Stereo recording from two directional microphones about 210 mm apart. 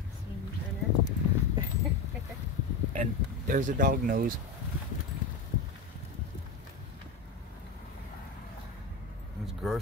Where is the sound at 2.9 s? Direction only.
40° right (ahead or behind).